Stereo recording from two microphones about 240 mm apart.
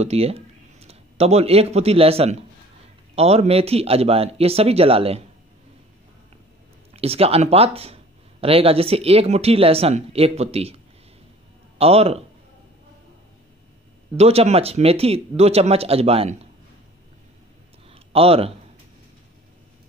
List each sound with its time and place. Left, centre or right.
0.0 s speech: right
6.9 s speech: right
11.8 s speech: right
14.1 s speech: right
17.8 s a sound: right